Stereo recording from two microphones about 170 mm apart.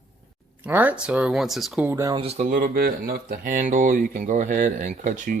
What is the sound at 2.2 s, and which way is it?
Speech, 35° right (ahead or behind).